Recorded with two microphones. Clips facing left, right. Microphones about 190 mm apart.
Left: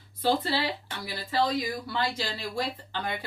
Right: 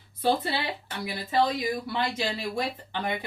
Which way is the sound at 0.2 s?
20° right (ahead or behind).